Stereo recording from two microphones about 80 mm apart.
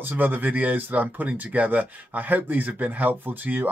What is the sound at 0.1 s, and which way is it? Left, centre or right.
Speech, right.